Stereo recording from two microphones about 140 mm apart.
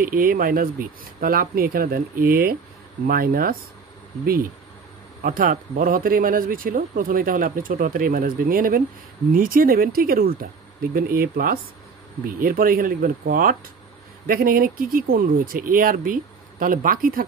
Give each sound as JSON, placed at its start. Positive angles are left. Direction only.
{"t": 0.0, "sound": "speech", "side_deg": -85}
{"t": 5.2, "sound": "speech", "side_deg": -80}